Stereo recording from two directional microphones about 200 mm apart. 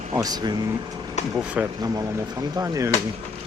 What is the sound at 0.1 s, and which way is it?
Speech, 20° right (ahead or behind).